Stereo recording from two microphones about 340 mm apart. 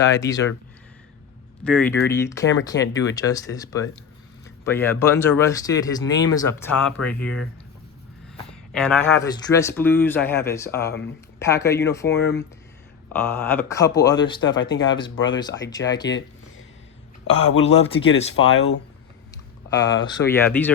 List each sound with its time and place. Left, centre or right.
0.1 s speech: centre
1.6 s speech: centre
8.4 s speech: centre
12.1 s speech: left
13.1 s speech: centre
15.1 s speech: left
15.4 s speech: centre
16.0 s a sound: left
17.2 s speech: left
17.6 s speech: centre
18.3 s speech: left
20.0 s speech: centre